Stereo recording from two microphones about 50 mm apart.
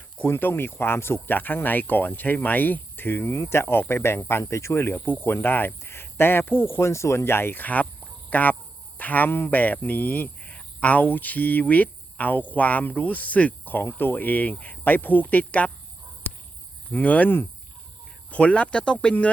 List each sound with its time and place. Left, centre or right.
0.3 s speech: left
1.3 s speech: left
3.3 s speech: left
5.0 s speech: left
7.5 s speech: left
13.7 s speech: left
16.9 s speech: left